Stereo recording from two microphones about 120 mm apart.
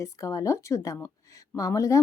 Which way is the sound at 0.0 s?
25° left (ahead or behind).